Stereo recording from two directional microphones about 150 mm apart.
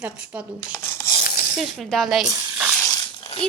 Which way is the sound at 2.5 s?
5° right (ahead or behind).